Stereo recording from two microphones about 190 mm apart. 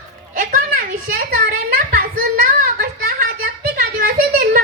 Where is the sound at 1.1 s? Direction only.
45° right (ahead or behind).